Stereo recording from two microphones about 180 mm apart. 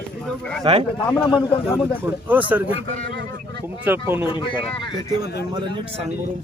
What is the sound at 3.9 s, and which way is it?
Speech, 10° right (ahead or behind).